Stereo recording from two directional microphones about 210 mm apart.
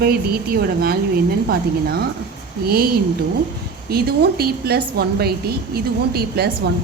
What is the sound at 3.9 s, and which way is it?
A woman's voice, 50° right (ahead or behind).